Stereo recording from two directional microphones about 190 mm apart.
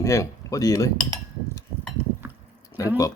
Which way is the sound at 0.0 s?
15° left (ahead or behind).